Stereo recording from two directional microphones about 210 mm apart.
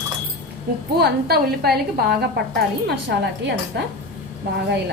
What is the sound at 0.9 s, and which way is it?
A woman's voice, 50° right (ahead or behind).